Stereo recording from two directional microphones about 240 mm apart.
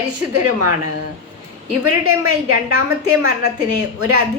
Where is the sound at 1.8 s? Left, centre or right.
Right.